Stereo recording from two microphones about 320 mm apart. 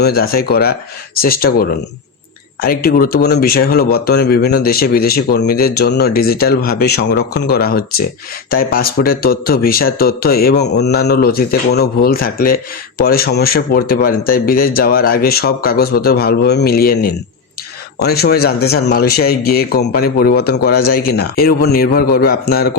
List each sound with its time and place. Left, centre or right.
0.0 s speech: left